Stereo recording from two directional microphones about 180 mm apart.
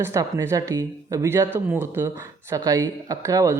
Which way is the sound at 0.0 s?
15° right (ahead or behind).